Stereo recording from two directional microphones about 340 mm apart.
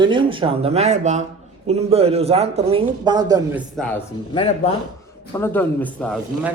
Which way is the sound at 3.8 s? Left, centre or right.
Centre.